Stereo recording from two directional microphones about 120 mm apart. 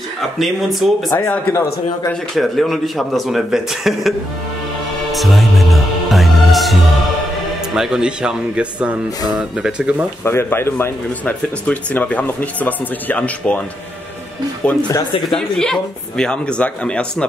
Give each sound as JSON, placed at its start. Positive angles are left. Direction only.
{"t": 0.4, "sound": "speech", "side_deg": 0}
{"t": 1.1, "sound": "speech", "side_deg": 15}
{"t": 2.3, "sound": "speech", "side_deg": 0}
{"t": 5.1, "sound": "music", "side_deg": 0}
{"t": 7.7, "sound": "speech", "side_deg": -5}
{"t": 10.2, "sound": "speech", "side_deg": 20}
{"t": 14.6, "sound": "speech", "side_deg": 10}